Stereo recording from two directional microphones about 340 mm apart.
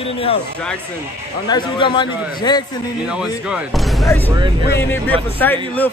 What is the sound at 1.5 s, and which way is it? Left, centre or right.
A man's voice, centre.